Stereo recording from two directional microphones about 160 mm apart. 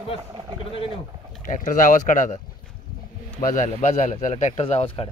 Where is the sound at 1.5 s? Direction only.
55° left (ahead or behind).